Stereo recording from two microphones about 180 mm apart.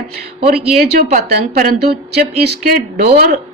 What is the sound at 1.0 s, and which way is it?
Speech, 45° right (ahead or behind).